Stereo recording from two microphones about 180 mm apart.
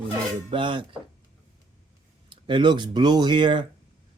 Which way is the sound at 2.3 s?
25° right (ahead or behind).